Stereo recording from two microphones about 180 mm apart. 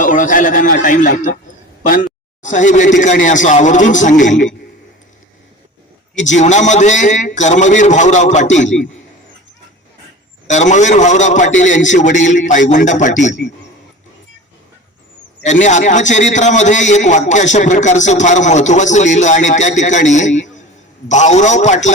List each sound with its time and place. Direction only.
0.0 s a man's voice: 45° left (ahead or behind)
6.1 s a man's voice: 40° left (ahead or behind)
10.4 s a man's voice: 40° left (ahead or behind)
15.4 s a man's voice: 40° left (ahead or behind)